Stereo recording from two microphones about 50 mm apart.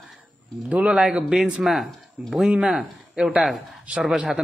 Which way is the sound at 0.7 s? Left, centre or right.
Centre.